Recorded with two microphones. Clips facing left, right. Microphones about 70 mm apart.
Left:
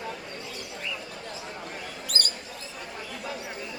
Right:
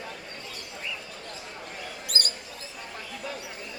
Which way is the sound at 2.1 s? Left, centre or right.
Left.